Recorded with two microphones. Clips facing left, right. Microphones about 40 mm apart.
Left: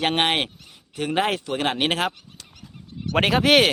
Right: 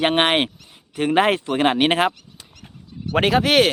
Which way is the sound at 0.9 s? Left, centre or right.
Right.